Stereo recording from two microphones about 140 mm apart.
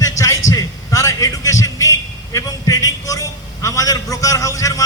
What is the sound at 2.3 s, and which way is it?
A man's voice, 25° left (ahead or behind).